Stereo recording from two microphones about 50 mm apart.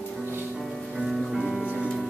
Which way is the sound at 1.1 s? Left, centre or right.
Centre.